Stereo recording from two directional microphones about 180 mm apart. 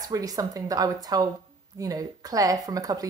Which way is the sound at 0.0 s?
20° right (ahead or behind).